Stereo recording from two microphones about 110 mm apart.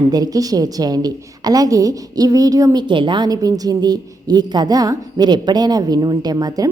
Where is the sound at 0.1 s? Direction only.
35° right (ahead or behind).